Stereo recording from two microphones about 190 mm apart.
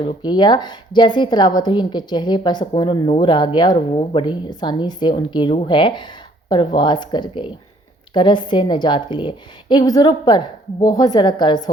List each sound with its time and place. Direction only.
0.3 s a woman's voice: 25° left (ahead or behind)